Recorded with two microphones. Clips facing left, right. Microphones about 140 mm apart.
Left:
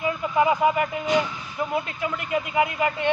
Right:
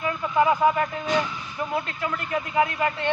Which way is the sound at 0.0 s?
15° left (ahead or behind).